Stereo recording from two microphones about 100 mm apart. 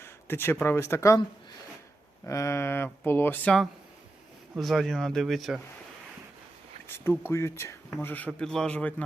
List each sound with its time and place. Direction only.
0.0 s speech: 25° left (ahead or behind)
2.2 s speech: 30° left (ahead or behind)
4.5 s speech: centre (ahead or behind)
6.8 s a sound: 25° left (ahead or behind)
7.3 s speech: 25° left (ahead or behind)
8.0 s a man's voice: 15° left (ahead or behind)
8.3 s a man's voice: 5° left (ahead or behind)